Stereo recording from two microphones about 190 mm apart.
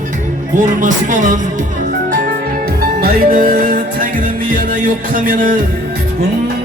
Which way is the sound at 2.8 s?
50° right (ahead or behind).